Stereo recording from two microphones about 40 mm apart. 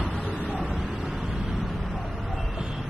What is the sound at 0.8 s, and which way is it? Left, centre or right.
Vehicle, centre.